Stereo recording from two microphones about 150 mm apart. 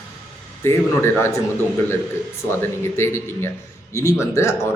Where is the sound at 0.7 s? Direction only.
20° left (ahead or behind).